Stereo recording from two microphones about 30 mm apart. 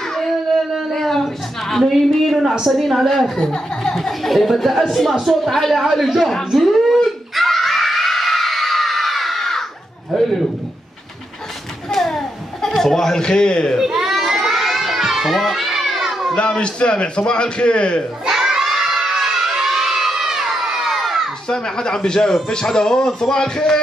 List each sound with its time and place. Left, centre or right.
0.9 s a sound: centre
1.9 s speech: centre
3.3 s speech: left; by 5.9 s centre
6.5 s a sound: centre
7.3 s screaming: centre
10.1 s a man's voice: centre
11.9 s a sound: centre
13.1 s speech: left
13.7 s baby cry: centre
14.2 s child singing: centre
14.5 s children playing: centre
16.3 s a man's voice: left
18.3 s children shouting: centre
21.5 s speech: left